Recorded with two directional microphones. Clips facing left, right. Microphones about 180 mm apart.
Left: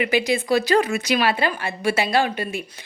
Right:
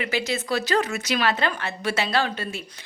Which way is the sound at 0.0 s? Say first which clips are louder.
Left 6 dB; 15° left (ahead or behind).